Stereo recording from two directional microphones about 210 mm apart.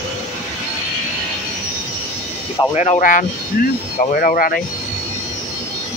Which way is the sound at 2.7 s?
30° left (ahead or behind).